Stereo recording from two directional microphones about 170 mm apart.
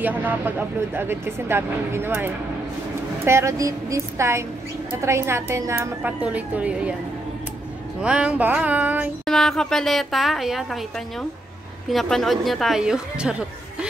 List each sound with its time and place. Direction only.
0.0 s speech: 10° right (ahead or behind)
8.0 s speech: 5° right (ahead or behind)
9.2 s a woman's voice: centre (ahead or behind)